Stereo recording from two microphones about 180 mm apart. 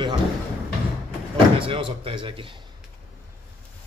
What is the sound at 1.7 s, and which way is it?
Speech, 30° right (ahead or behind).